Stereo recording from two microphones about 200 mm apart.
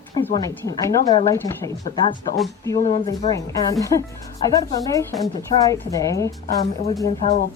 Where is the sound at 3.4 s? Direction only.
15° left (ahead or behind).